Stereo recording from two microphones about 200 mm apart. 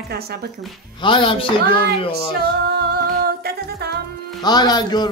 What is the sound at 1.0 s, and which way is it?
Speech, 25° left (ahead or behind).